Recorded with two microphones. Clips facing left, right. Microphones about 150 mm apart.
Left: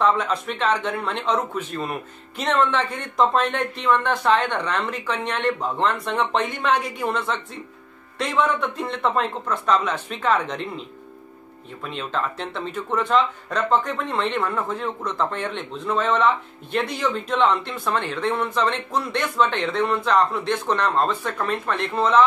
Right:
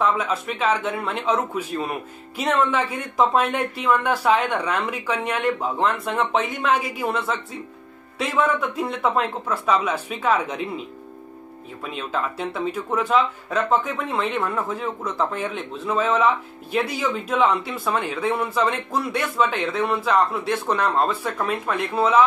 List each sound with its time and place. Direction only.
0.0 s speech: 5° right (ahead or behind)